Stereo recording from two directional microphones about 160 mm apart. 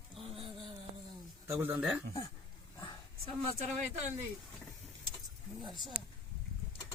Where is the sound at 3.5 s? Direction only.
45° right (ahead or behind).